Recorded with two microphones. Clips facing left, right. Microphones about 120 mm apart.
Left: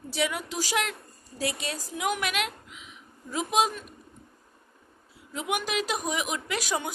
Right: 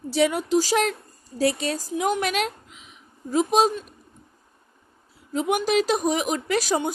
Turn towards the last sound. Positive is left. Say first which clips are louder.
# right 7 dB
turn(degrees=-35)  # may be behind; listen again after turning